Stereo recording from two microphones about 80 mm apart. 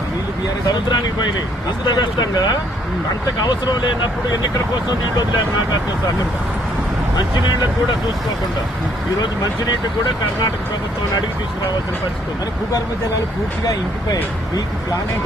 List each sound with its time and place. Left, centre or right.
1.9 s speech: left